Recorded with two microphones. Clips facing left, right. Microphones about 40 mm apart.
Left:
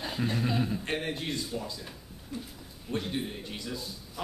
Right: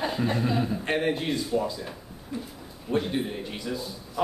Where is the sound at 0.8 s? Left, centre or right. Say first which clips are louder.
Right 7 dB; centre.